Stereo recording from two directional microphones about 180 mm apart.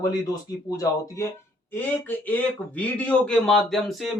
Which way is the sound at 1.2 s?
15° left (ahead or behind).